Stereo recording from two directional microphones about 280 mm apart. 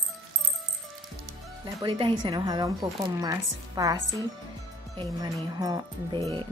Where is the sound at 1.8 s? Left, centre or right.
Centre.